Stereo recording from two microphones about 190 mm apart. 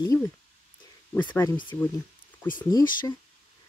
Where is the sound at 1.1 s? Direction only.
10° left (ahead or behind).